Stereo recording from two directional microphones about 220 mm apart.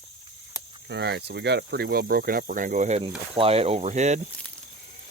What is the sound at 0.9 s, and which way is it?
Speech, 50° right (ahead or behind).